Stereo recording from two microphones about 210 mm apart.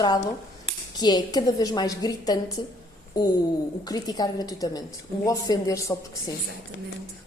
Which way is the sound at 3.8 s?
20° left (ahead or behind).